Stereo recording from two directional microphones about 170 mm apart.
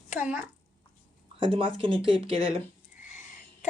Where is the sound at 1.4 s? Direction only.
30° right (ahead or behind).